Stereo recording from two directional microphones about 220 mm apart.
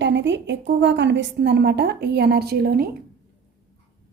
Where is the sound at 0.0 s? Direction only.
55° right (ahead or behind).